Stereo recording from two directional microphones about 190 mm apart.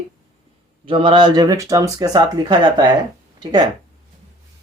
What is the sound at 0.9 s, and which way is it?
Speech, 25° right (ahead or behind).